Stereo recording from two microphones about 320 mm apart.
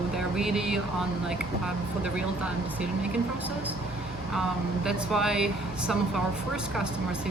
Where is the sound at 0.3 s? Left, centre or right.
Centre.